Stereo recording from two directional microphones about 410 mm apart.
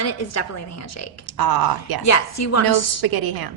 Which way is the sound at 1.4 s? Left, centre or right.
Right.